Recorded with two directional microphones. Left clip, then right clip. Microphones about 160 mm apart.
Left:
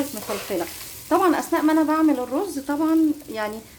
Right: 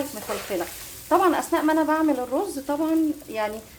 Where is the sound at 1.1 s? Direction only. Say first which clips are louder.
Left 1 dB; 25° left (ahead or behind).